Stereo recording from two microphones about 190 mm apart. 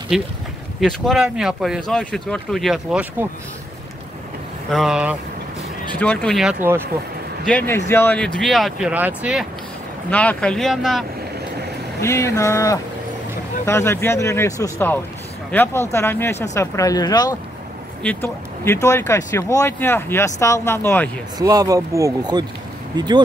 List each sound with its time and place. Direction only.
0.1 s speech: centre (ahead or behind)
4.6 s speech: centre (ahead or behind)
10.1 s speech: 5° left (ahead or behind)
12.0 s speech: 15° left (ahead or behind)
21.4 s speech: 20° right (ahead or behind)